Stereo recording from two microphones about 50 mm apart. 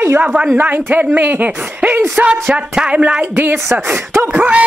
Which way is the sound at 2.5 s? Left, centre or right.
Centre.